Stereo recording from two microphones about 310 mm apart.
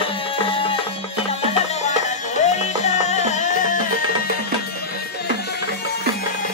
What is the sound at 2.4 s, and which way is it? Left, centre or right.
Music, left.